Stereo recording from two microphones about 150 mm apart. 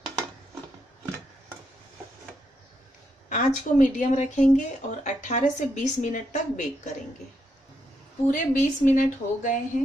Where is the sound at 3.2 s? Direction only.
60° left (ahead or behind).